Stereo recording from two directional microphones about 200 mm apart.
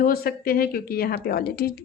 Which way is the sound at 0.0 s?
45° left (ahead or behind).